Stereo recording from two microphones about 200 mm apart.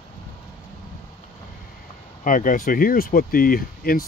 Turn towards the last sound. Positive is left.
turn(degrees=45)  # may be behind; listen again after turning